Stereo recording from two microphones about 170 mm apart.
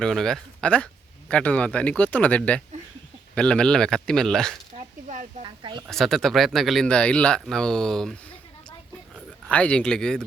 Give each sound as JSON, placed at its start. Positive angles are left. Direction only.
{"t": 0.0, "sound": "speech", "side_deg": 0}
{"t": 4.7, "sound": "a sound", "side_deg": -35}
{"t": 5.4, "sound": "speech", "side_deg": -30}
{"t": 5.9, "sound": "speech", "side_deg": 0}
{"t": 9.5, "sound": "speech", "side_deg": 5}